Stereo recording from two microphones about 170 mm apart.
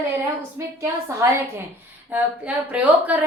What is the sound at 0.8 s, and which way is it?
A woman's voice, 15° right (ahead or behind).